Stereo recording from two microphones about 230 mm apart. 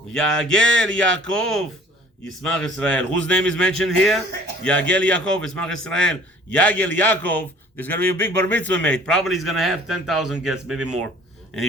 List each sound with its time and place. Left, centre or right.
0.1 s a man's voice: centre